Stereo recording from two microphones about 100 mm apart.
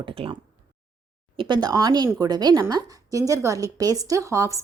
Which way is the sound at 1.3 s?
50° right (ahead or behind).